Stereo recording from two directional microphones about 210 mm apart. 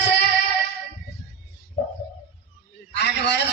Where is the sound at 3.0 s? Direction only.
55° left (ahead or behind).